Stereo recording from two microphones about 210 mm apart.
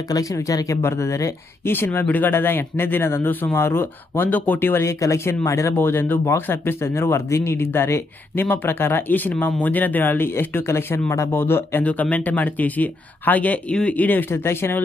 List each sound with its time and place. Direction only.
0.1 s speech: 15° left (ahead or behind)